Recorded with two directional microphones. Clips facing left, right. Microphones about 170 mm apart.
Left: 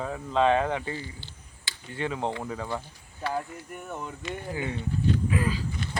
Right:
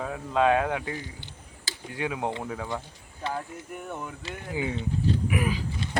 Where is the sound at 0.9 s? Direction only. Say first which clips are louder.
Even; 15° right (ahead or behind).